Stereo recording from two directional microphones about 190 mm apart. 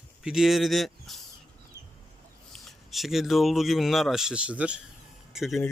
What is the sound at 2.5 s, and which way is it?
Speech, centre (ahead or behind).